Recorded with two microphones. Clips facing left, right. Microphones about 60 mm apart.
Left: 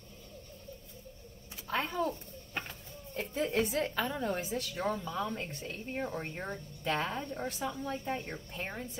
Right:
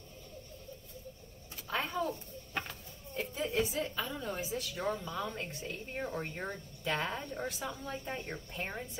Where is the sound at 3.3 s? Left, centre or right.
Left.